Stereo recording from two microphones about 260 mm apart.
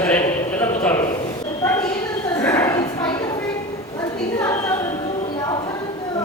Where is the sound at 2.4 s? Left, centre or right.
Centre.